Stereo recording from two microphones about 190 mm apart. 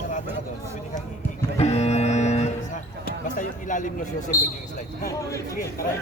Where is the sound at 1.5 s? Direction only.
35° left (ahead or behind).